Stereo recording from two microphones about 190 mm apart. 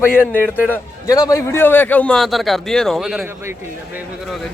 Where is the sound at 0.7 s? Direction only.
15° left (ahead or behind); by 3.2 s centre (ahead or behind).